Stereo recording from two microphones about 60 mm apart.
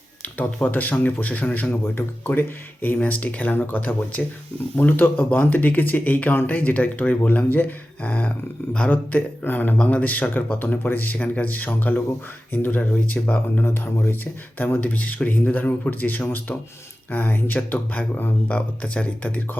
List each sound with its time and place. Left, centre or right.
0.2 s speech: left
13.8 s speech: left